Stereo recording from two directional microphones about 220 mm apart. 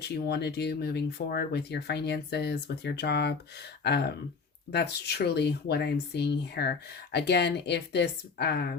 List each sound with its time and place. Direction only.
0.3 s speech: 50° left (ahead or behind)